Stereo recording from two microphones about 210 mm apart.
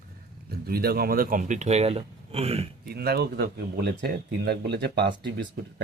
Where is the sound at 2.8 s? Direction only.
50° right (ahead or behind).